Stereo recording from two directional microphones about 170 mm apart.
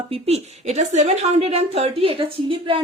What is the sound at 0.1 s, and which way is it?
A woman's voice, 40° right (ahead or behind).